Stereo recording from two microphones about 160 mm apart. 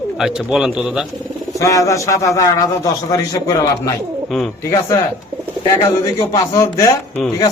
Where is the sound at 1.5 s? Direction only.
20° left (ahead or behind).